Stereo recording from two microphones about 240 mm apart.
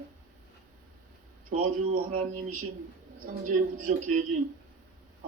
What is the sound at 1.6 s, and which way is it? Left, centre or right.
A man's voice, right.